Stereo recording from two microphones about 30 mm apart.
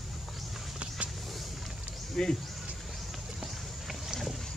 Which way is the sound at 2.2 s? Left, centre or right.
Centre.